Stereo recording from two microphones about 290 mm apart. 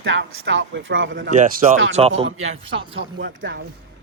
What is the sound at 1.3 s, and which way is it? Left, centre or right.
Speech, right.